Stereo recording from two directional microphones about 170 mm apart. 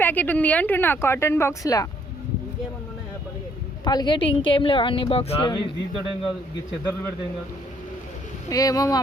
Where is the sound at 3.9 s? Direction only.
25° left (ahead or behind).